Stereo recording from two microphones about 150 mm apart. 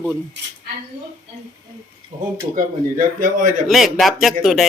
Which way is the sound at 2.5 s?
65° right (ahead or behind).